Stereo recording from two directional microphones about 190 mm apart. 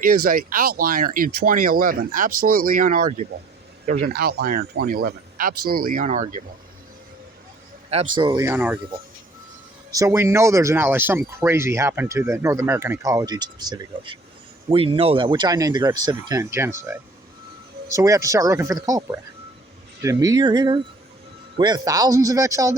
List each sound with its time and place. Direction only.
0.0 s speech: 50° right (ahead or behind)
8.1 s speech: 25° right (ahead or behind)
9.9 s speech: 15° right (ahead or behind)